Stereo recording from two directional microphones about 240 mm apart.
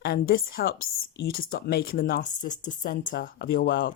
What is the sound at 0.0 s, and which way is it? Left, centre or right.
Speech, left.